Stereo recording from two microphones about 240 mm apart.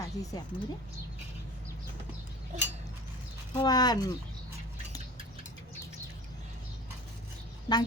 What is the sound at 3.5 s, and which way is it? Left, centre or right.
Speech, centre.